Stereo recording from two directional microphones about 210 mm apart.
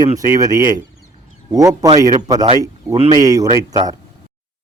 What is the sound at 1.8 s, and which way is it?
Speech, 15° right (ahead or behind).